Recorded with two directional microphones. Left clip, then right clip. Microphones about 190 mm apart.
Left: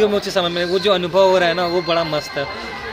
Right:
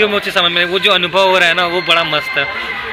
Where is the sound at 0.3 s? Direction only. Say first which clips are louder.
Right 5 dB; 20° left (ahead or behind).